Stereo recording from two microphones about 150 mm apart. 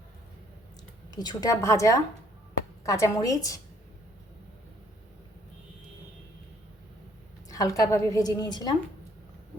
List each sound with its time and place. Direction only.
1.1 s a woman's voice: 25° left (ahead or behind)
7.4 s a woman's voice: 25° left (ahead or behind)